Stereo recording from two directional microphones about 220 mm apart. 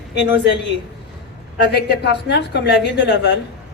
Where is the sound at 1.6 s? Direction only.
50° left (ahead or behind).